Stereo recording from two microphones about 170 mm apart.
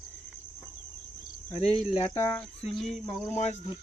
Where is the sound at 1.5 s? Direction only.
35° left (ahead or behind).